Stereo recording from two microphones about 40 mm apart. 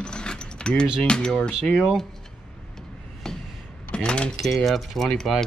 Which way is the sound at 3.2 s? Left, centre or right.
Centre.